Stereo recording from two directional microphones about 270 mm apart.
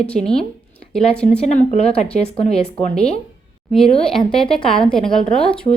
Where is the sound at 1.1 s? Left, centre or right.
Centre.